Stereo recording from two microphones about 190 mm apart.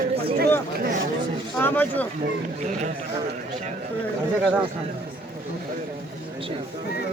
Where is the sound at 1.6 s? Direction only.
10° left (ahead or behind).